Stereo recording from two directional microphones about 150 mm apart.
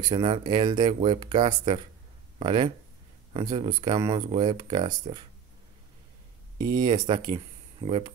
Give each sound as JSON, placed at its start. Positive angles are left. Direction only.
{"t": 0.1, "sound": "speech", "side_deg": -35}
{"t": 6.6, "sound": "speech", "side_deg": -30}